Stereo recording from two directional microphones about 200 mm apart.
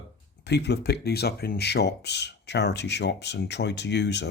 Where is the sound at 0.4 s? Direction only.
55° left (ahead or behind).